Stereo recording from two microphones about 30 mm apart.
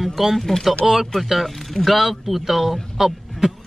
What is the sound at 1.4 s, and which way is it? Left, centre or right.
Speech, centre.